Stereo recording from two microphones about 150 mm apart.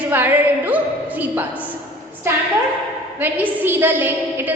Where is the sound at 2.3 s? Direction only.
15° right (ahead or behind).